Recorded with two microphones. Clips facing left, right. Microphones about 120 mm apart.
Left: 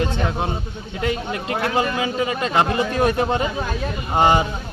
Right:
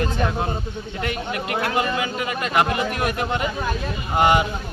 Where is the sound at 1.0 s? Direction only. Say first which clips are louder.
Left 4 dB; 25° left (ahead or behind).